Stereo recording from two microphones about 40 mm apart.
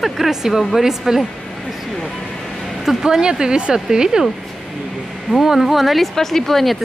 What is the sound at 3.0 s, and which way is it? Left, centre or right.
Speech, centre.